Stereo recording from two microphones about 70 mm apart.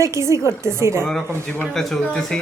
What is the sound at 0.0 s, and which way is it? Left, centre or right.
A woman's voice, right.